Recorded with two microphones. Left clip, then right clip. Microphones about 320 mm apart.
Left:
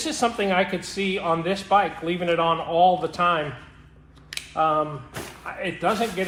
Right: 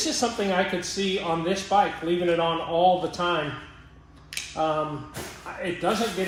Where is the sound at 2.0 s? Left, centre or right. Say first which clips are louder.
Left 2 dB; left.